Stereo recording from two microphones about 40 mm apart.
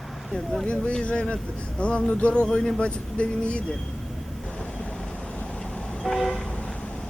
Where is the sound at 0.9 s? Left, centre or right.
Left.